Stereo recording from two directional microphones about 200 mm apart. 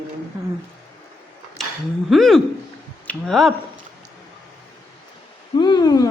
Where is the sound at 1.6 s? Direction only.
Centre (ahead or behind).